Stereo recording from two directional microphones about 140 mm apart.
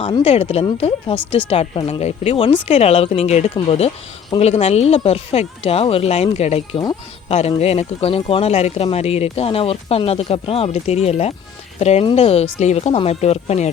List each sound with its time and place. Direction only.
0.0 s speech: 40° left (ahead or behind)